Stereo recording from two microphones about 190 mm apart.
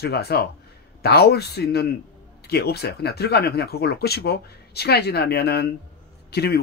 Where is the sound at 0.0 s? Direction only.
55° left (ahead or behind).